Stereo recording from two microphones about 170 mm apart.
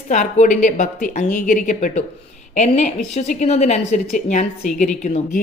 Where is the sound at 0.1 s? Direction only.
45° left (ahead or behind).